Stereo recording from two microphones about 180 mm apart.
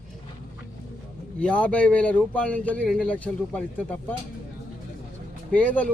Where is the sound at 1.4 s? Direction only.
5° left (ahead or behind).